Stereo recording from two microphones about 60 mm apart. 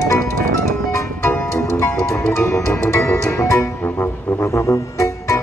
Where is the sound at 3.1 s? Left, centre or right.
Left.